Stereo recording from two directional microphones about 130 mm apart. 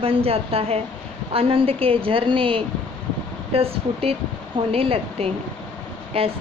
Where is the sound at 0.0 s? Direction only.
45° right (ahead or behind).